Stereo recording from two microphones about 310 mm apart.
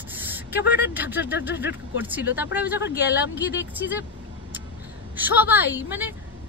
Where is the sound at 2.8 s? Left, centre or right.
Left.